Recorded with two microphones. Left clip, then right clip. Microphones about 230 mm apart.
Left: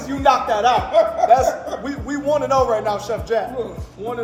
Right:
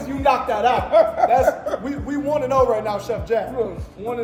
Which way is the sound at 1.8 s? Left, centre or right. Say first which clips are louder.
Left 2 dB; left.